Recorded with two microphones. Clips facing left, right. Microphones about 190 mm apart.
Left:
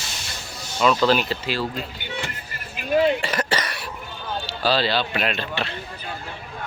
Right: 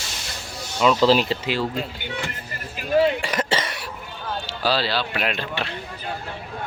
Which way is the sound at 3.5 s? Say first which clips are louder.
Right 1 dB; 25° right (ahead or behind).